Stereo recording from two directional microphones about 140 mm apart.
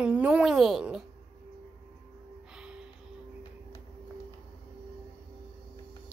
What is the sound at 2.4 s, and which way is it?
Music, 5° right (ahead or behind).